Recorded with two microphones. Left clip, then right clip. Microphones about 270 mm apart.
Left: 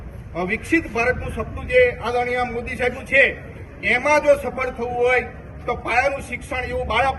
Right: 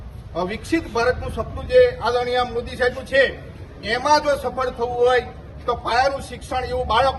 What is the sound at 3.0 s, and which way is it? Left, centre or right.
Speech, centre.